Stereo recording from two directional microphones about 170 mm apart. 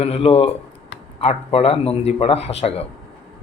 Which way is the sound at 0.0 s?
35° left (ahead or behind).